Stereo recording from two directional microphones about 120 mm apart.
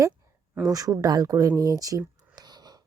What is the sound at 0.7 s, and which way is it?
A woman's voice, 30° right (ahead or behind).